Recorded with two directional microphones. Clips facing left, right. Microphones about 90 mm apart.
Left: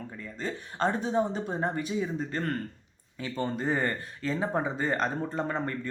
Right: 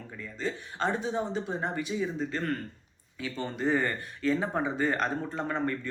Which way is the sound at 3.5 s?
30° left (ahead or behind).